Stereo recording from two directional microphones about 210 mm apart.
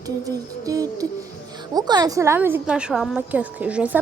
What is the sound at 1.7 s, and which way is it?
A woman's voice, 20° right (ahead or behind).